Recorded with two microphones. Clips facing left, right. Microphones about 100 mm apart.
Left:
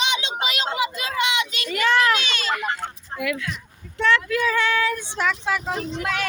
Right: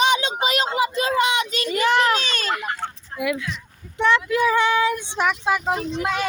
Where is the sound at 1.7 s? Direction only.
20° right (ahead or behind).